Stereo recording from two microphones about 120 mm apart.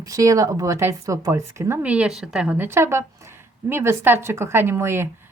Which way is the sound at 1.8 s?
10° right (ahead or behind).